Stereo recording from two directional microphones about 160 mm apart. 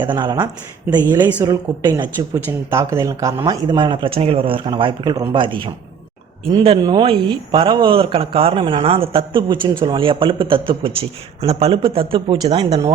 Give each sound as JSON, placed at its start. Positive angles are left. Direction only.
{"t": 0.0, "sound": "a woman's voice", "side_deg": -30}
{"t": 6.8, "sound": "speech", "side_deg": -30}